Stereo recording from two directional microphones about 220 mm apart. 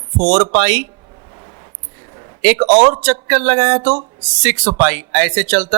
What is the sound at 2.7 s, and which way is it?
Speech, 35° right (ahead or behind).